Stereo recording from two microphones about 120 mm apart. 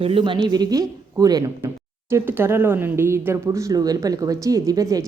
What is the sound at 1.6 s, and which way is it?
Speech, 20° right (ahead or behind).